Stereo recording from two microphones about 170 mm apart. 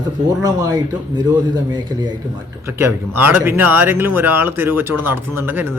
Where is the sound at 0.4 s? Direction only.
25° right (ahead or behind).